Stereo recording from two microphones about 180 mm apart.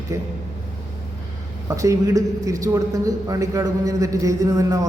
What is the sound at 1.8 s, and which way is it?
A man's voice, 20° right (ahead or behind).